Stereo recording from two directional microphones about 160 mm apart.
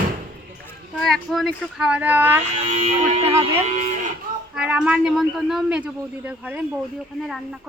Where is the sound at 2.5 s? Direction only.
45° right (ahead or behind).